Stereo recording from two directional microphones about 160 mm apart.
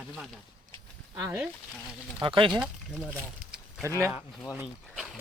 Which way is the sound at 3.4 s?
65° right (ahead or behind).